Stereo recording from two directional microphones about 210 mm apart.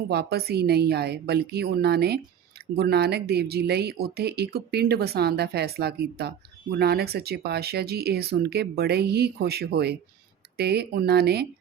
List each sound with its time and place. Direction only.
0.1 s speech: 50° right (ahead or behind)